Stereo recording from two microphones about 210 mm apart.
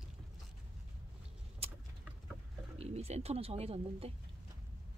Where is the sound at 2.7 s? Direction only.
30° right (ahead or behind).